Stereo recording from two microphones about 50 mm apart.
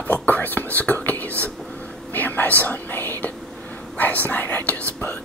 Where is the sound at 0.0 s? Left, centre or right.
Left.